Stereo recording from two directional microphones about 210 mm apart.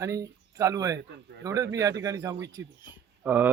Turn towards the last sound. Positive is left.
turn(degrees=-10)  # may be behind; listen again after turning